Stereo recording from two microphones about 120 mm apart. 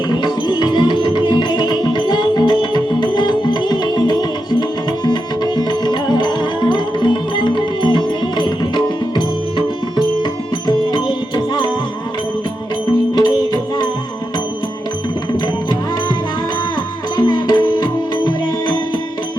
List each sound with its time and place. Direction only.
0.1 s music: 35° left (ahead or behind)
13.1 s music: 35° left (ahead or behind)
17.2 s music: 35° left (ahead or behind)